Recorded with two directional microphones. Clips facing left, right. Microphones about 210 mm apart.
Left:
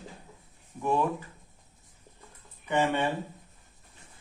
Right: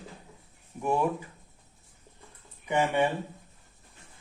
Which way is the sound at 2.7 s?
10° right (ahead or behind).